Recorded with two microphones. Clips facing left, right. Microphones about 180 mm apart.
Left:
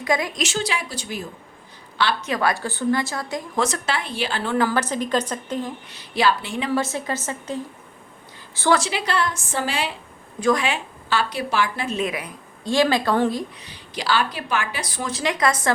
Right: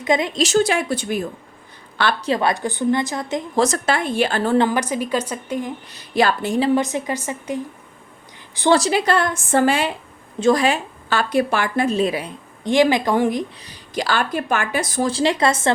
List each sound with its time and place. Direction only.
0.0 s a woman's voice: 20° right (ahead or behind)
0.4 s speech: 50° right (ahead or behind)
2.2 s a woman's voice: 25° right (ahead or behind)
3.6 s speech: 45° right (ahead or behind)
4.7 s a woman's voice: 10° right (ahead or behind)
5.9 s speech: 45° right (ahead or behind)
6.7 s a woman's voice: 15° right (ahead or behind)
8.7 s speech: 40° right (ahead or behind)
10.4 s speech: 35° right (ahead or behind); by 11.9 s 50° right (ahead or behind)
11.9 s a woman's voice: 35° right (ahead or behind)
12.6 s a woman's voice: 20° right (ahead or behind)
13.6 s speech: 45° right (ahead or behind)
15.0 s a woman's voice: 30° right (ahead or behind)